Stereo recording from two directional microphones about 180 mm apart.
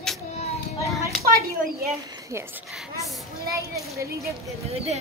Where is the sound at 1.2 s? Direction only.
55° right (ahead or behind).